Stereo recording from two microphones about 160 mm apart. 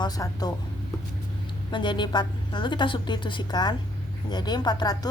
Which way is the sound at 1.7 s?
30° left (ahead or behind).